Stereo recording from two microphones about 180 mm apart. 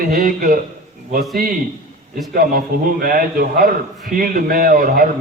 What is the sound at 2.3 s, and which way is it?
A man's voice, 55° right (ahead or behind).